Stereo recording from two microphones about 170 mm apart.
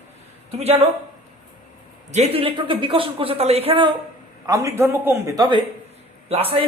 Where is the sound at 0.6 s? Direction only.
35° right (ahead or behind).